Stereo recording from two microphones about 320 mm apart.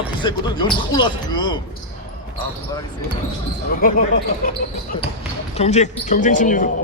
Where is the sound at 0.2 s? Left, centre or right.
Centre.